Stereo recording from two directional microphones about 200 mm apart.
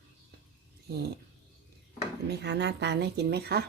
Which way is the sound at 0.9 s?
55° right (ahead or behind).